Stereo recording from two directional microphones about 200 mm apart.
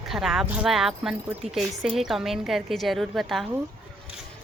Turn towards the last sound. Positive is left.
turn(degrees=0)  # may be behind; listen again after turning